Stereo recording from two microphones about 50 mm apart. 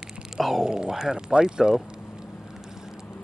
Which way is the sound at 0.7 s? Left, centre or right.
Centre.